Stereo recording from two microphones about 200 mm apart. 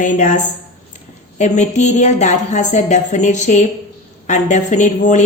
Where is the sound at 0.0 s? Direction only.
40° left (ahead or behind).